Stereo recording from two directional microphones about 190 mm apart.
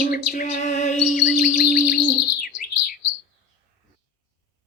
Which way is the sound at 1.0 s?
40° left (ahead or behind).